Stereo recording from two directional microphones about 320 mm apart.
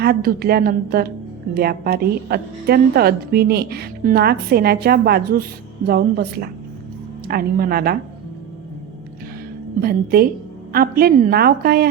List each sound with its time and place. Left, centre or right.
0.0 s a woman's voice: right
9.8 s a woman's voice: right